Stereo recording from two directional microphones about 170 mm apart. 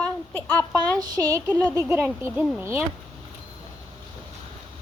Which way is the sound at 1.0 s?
20° right (ahead or behind).